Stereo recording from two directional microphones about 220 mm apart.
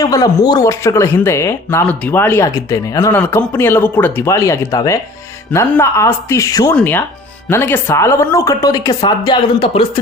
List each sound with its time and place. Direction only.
0.0 s speech: 15° left (ahead or behind)